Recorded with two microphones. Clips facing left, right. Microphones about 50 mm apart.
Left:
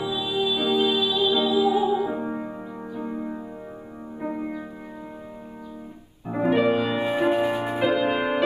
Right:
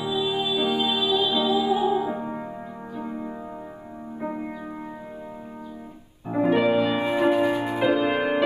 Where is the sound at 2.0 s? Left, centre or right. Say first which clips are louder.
Left 1 dB; centre.